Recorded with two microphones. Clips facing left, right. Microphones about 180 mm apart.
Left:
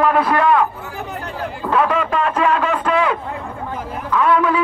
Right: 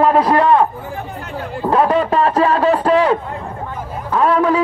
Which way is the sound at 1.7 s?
35° right (ahead or behind).